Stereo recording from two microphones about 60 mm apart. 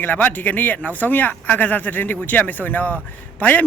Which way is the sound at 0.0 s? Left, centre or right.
Left.